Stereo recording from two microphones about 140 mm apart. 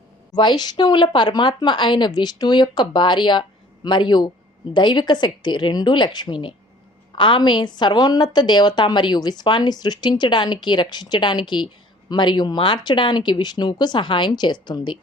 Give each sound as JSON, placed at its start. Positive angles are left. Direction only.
{"t": 0.3, "sound": "a woman's voice", "side_deg": 30}